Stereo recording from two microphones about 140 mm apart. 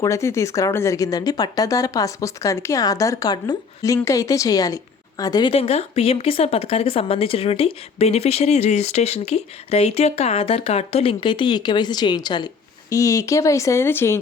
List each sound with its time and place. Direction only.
0.0 s speech: 20° left (ahead or behind)